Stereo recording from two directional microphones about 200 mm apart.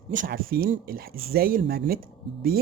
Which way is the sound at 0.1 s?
45° right (ahead or behind).